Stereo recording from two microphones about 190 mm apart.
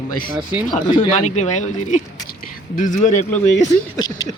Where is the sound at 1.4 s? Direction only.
40° left (ahead or behind).